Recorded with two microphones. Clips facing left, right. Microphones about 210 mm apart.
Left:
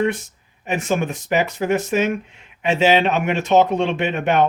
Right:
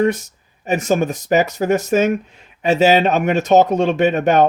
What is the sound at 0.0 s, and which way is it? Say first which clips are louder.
Speech: right 4 dB; 40° right (ahead or behind).